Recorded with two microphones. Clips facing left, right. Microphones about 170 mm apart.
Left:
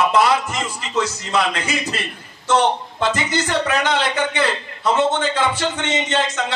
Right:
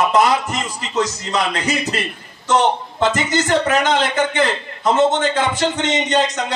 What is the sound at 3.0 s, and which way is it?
A man's voice, 45° right (ahead or behind).